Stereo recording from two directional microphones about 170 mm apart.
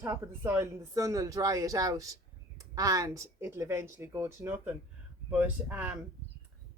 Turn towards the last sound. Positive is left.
turn(degrees=-10)  # may be behind; listen again after turning